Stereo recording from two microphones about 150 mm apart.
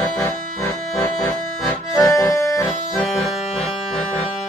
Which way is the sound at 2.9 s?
5° left (ahead or behind).